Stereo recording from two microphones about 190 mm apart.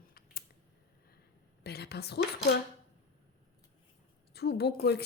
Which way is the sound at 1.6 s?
60° left (ahead or behind).